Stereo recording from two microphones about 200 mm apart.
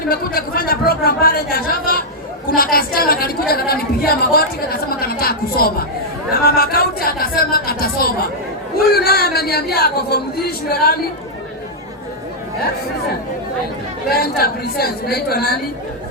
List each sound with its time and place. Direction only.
0.1 s a sound: 50° left (ahead or behind)
2.5 s chatter: 45° left (ahead or behind)
6.4 s a sound: 50° left (ahead or behind)
8.9 s music: 50° left (ahead or behind)
10.7 s a woman's voice: 50° left (ahead or behind)
14.1 s a woman's voice: 50° left (ahead or behind)